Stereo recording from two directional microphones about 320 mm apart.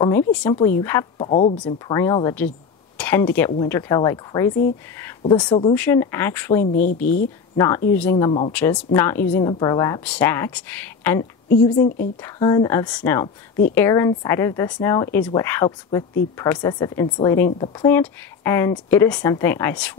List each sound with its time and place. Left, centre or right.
0.3 s speech: centre
6.6 s speech: left
7.5 s speech: centre